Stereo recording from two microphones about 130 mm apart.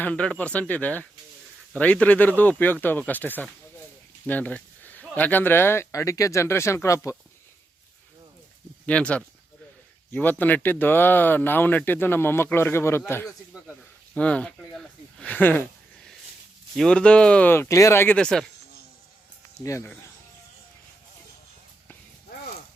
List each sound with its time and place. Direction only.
0.0 s speech: 10° left (ahead or behind)
8.9 s speech: 10° left (ahead or behind)
14.1 s speech: 10° left (ahead or behind)
16.7 s speech: 5° left (ahead or behind)
19.6 s speech: 25° left (ahead or behind)